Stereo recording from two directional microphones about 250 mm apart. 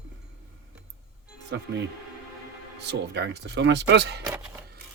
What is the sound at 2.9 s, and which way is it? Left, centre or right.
Speech, right.